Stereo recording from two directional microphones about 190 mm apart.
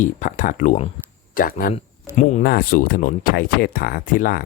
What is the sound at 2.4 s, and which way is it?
Speech, 50° left (ahead or behind).